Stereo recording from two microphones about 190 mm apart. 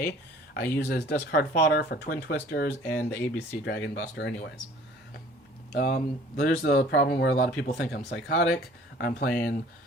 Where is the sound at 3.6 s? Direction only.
70° left (ahead or behind).